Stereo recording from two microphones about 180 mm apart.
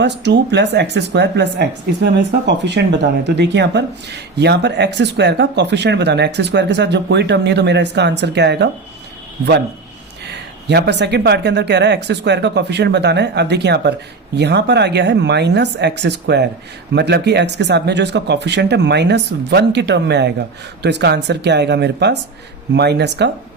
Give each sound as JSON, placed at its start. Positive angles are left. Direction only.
{"t": 0.0, "sound": "speech", "side_deg": -70}
{"t": 10.3, "sound": "speech", "side_deg": -70}